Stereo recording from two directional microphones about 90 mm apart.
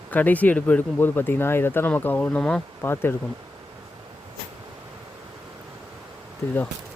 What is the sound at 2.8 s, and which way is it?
Speech, 25° left (ahead or behind).